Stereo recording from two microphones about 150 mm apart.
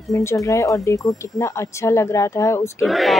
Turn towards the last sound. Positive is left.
turn(degrees=0)  # may be behind; listen again after turning